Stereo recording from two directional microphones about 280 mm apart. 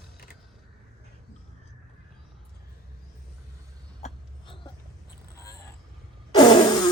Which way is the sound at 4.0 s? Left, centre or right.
Centre.